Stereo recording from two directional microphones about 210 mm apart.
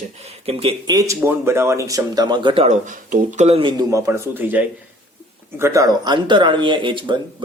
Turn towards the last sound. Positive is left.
turn(degrees=-25)  # may be behind; listen again after turning